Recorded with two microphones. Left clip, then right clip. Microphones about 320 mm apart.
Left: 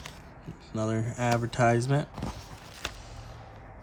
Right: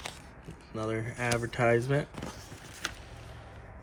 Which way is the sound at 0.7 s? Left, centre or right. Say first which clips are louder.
Left 2 dB; centre.